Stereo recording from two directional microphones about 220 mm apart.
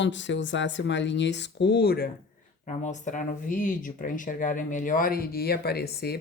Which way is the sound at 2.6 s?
35° left (ahead or behind).